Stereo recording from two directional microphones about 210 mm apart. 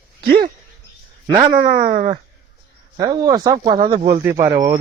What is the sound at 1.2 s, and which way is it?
Speech, 20° right (ahead or behind).